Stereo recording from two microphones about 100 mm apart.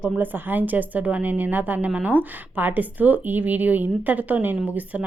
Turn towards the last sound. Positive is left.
turn(degrees=-20)  # may be behind; listen again after turning